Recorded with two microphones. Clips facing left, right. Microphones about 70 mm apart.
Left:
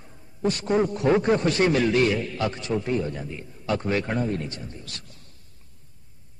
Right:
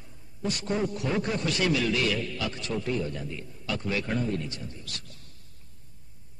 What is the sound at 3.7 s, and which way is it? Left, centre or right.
A man's voice, left.